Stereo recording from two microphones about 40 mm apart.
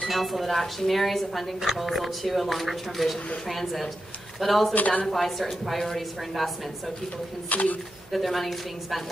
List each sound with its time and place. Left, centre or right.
0.1 s a woman's voice: centre
4.7 s speech: left
5.0 s a woman's voice: centre
7.4 s speech: left
8.1 s a woman's voice: centre